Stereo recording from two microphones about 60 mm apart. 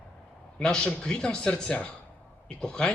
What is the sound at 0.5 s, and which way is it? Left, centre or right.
A man's voice, centre.